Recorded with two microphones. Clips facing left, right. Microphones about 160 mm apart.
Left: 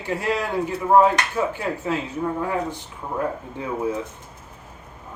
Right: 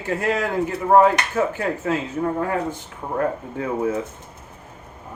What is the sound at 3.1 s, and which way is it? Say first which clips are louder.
Speech: right 3 dB; 55° right (ahead or behind).